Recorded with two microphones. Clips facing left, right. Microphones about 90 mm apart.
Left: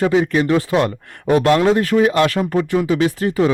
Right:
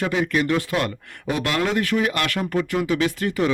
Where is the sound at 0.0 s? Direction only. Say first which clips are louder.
Left 6 dB; 25° left (ahead or behind).